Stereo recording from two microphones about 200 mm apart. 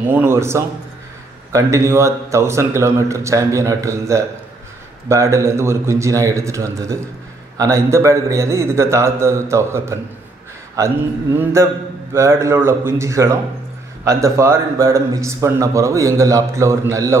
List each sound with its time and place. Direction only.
0.1 s speech: 10° right (ahead or behind)